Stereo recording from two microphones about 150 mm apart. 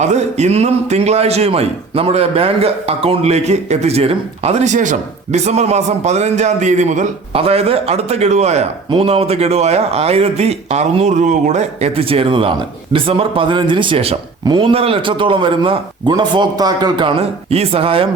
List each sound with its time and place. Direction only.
0.0 s a man's voice: 50° right (ahead or behind)
7.3 s a man's voice: 40° right (ahead or behind)